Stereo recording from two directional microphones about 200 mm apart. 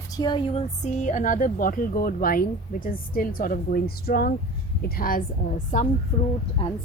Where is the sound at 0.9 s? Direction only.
40° left (ahead or behind).